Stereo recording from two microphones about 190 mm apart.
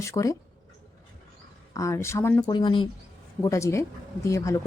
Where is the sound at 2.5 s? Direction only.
25° left (ahead or behind).